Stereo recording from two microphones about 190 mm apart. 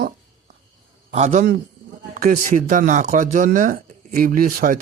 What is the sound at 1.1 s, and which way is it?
A man's voice, 35° right (ahead or behind).